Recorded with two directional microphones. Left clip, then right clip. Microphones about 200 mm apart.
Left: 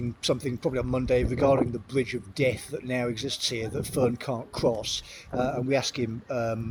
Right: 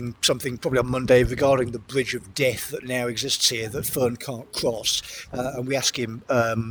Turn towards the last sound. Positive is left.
turn(degrees=-55)  # may be behind; listen again after turning